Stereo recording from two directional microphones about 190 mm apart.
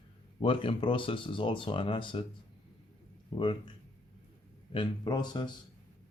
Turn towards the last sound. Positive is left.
turn(degrees=25)  # may be behind; listen again after turning